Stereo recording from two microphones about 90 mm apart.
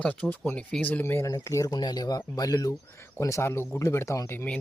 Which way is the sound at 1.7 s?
50° left (ahead or behind).